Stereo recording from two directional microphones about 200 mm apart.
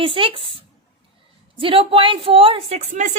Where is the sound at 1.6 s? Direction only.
25° right (ahead or behind).